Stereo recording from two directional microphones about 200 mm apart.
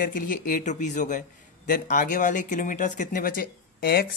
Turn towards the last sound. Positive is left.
turn(degrees=45)  # may be behind; listen again after turning